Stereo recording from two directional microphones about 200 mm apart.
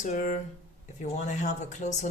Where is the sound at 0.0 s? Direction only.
40° left (ahead or behind).